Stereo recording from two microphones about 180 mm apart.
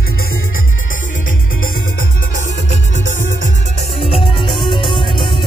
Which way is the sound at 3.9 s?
30° left (ahead or behind).